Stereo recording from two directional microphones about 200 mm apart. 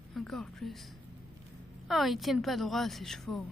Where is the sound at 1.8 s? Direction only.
Centre (ahead or behind).